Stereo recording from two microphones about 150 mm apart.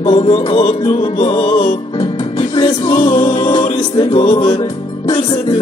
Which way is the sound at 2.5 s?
35° left (ahead or behind).